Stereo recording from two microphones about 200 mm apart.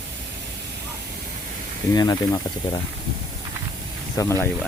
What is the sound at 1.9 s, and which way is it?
Speech, 20° left (ahead or behind).